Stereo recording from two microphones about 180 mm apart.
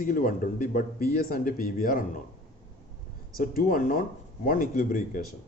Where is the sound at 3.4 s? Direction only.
55° left (ahead or behind).